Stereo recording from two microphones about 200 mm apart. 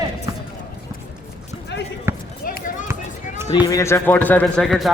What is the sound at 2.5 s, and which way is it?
Chop, 40° left (ahead or behind).